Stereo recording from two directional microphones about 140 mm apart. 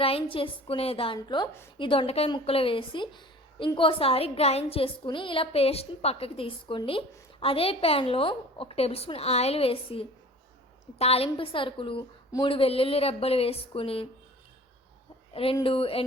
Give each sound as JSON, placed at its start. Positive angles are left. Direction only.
{"t": 0.0, "sound": "a woman's voice", "side_deg": 40}
{"t": 15.3, "sound": "a woman's voice", "side_deg": 40}